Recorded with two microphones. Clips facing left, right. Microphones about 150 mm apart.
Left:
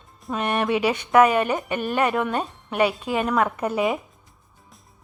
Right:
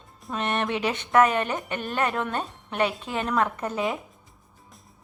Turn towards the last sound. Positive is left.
turn(degrees=10)  # may be behind; listen again after turning